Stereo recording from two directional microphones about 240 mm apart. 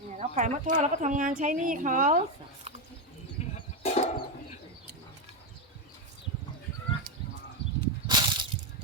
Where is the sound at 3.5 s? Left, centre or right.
Left.